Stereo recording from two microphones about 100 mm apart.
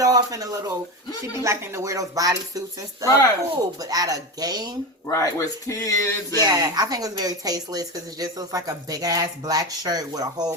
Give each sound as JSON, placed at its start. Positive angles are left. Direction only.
{"t": 0.0, "sound": "speech", "side_deg": -35}
{"t": 5.0, "sound": "speech", "side_deg": 35}
{"t": 6.4, "sound": "speech", "side_deg": -40}